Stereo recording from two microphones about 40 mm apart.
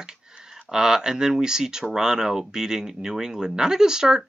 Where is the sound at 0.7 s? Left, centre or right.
Centre.